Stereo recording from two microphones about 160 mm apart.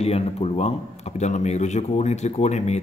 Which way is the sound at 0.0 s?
40° left (ahead or behind).